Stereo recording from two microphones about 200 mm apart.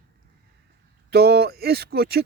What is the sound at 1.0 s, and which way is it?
Speech, 55° right (ahead or behind).